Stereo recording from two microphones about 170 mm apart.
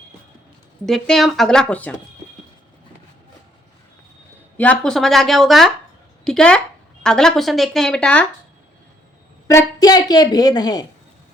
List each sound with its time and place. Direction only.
0.9 s speech: centre (ahead or behind)
4.5 s speech: 10° left (ahead or behind)
9.5 s a woman's voice: 20° left (ahead or behind)